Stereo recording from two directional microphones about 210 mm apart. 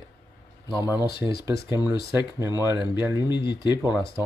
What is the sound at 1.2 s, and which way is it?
Speech, 5° right (ahead or behind).